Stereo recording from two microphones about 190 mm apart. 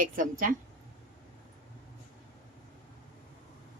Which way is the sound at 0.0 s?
45° right (ahead or behind).